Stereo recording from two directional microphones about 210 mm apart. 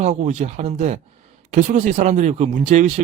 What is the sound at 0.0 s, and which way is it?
Speech, 35° right (ahead or behind).